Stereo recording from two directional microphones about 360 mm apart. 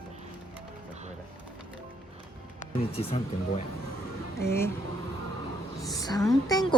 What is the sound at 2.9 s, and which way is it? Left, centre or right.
A woman's voice, centre.